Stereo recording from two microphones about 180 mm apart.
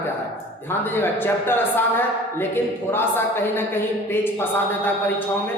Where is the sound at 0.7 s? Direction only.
10° left (ahead or behind).